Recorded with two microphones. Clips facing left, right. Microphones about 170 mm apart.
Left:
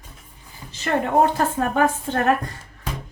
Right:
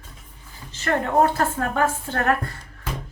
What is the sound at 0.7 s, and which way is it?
A woman's voice, 15° left (ahead or behind).